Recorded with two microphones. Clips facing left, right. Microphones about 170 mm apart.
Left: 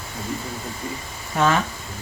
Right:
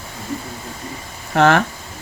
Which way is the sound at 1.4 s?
65° right (ahead or behind).